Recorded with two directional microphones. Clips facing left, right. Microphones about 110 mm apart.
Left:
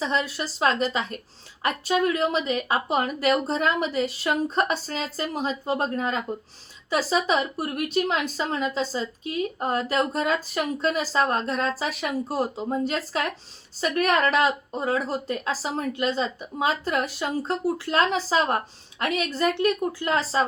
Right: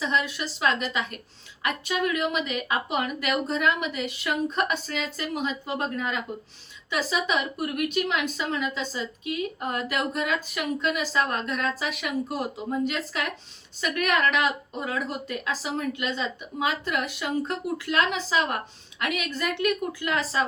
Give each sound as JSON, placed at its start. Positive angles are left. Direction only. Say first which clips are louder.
{"t": 0.0, "sound": "speech", "louder": "left 1 dB", "side_deg": 35}